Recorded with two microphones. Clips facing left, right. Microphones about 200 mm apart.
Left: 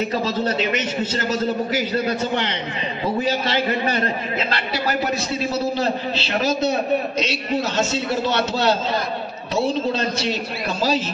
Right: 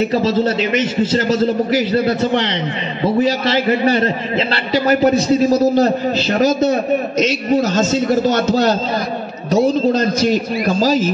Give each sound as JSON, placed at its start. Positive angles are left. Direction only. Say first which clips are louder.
{"t": 5.1, "sound": "a man's voice", "louder": "right 10 dB", "side_deg": -40}
{"t": 9.9, "sound": "a man's voice", "louder": "right 8 dB", "side_deg": -45}